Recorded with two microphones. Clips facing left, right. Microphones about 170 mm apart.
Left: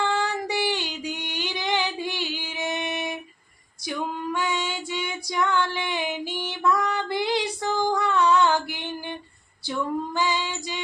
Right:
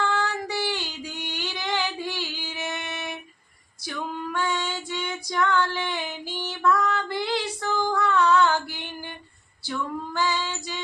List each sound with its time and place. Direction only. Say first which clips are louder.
0.0 s female singing: left 1 dB; 15° left (ahead or behind)